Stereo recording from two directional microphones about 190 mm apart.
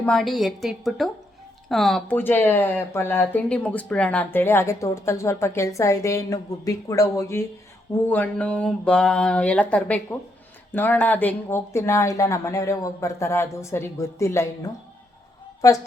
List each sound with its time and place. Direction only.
0.0 s a woman's voice: 5° left (ahead or behind)
15.6 s speech: 15° left (ahead or behind)